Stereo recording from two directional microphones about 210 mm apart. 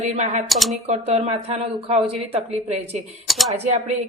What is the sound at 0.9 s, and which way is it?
Speech, 30° right (ahead or behind).